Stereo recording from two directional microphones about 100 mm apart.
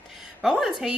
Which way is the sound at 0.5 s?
5° right (ahead or behind).